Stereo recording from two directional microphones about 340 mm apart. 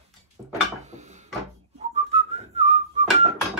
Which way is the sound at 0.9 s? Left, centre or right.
Centre.